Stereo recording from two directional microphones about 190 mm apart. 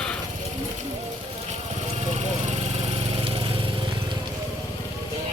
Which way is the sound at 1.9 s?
35° right (ahead or behind).